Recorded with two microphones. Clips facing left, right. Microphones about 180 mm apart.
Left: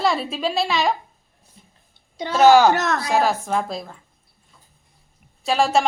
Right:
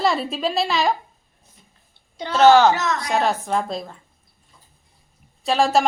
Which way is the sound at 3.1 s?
Centre (ahead or behind).